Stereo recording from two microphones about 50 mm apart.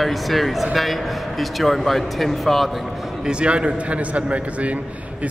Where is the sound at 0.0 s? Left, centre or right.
Centre.